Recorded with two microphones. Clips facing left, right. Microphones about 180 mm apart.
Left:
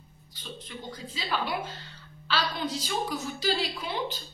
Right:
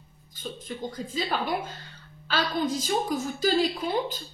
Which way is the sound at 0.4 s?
50° right (ahead or behind).